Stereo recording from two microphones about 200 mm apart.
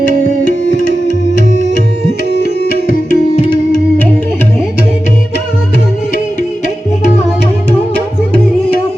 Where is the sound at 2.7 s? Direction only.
55° right (ahead or behind).